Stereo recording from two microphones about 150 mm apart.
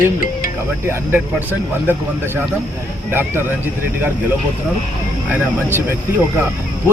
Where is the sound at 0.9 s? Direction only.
15° right (ahead or behind).